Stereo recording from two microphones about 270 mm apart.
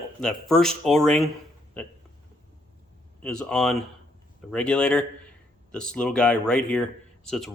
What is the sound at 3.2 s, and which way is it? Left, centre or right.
Speech, centre.